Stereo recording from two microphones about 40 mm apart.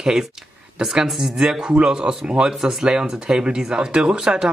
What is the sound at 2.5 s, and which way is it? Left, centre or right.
Speech, centre.